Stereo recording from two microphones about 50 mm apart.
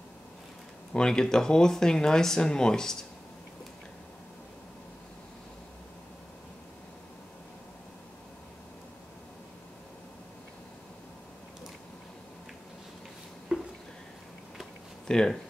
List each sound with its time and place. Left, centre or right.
0.9 s speech: centre
13.5 s a sound: centre
15.0 s speech: centre